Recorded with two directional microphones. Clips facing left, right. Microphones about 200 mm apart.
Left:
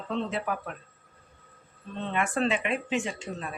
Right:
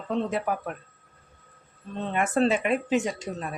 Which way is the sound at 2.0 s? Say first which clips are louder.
Right 4 dB; 40° right (ahead or behind).